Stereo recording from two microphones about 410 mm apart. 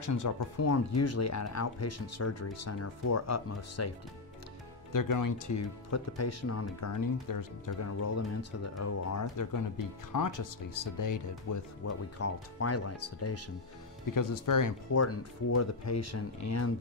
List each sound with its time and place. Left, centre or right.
0.0 s speech: left
4.9 s speech: left
14.1 s speech: left